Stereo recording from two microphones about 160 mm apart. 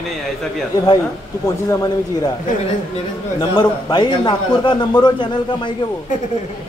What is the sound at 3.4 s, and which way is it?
A man's voice, 25° left (ahead or behind).